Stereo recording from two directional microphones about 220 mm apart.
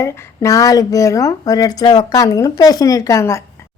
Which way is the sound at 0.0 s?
15° left (ahead or behind).